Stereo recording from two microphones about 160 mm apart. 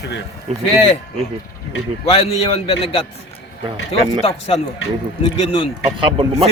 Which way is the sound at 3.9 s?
40° left (ahead or behind).